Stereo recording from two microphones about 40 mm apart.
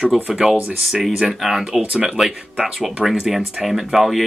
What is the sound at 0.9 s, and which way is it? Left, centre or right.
Speech, centre.